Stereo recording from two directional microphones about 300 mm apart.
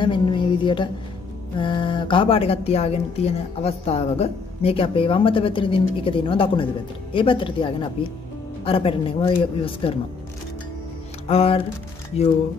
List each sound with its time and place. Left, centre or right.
0.0 s a sound: centre
1.6 s speech: centre
11.2 s music: centre